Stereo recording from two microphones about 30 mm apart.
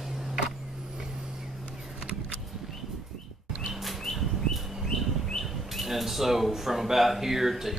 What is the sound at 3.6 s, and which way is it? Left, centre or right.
Bird, centre.